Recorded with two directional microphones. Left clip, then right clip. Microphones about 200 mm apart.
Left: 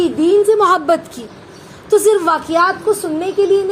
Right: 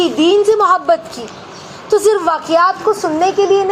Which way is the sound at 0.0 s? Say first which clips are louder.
Right 1 dB; 35° left (ahead or behind).